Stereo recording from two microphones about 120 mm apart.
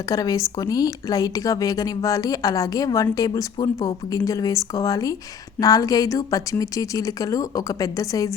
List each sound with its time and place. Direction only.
0.1 s speech: 30° left (ahead or behind)